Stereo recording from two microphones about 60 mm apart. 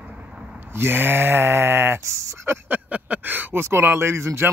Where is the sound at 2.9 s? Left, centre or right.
Right.